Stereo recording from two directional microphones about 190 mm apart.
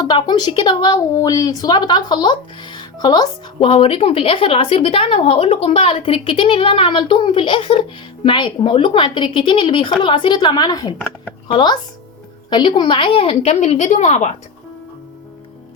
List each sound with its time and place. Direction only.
0.0 s a woman's voice: 20° left (ahead or behind); by 14.3 s 40° left (ahead or behind)